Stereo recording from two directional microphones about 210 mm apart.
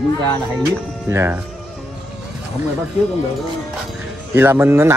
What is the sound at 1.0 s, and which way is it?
Speech, 10° right (ahead or behind).